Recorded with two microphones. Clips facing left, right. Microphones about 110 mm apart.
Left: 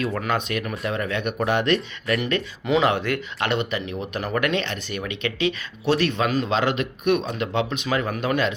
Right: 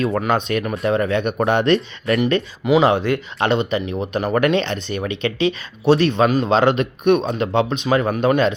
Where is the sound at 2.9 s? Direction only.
20° right (ahead or behind).